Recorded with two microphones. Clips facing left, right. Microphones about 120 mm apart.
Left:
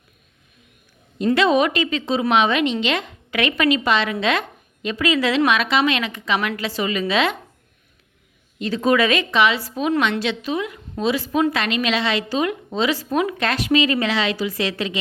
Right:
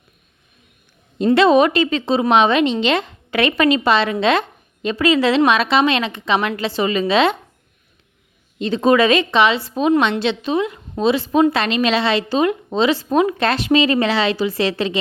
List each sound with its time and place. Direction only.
1.2 s a woman's voice: 30° right (ahead or behind)
8.5 s a woman's voice: 25° right (ahead or behind)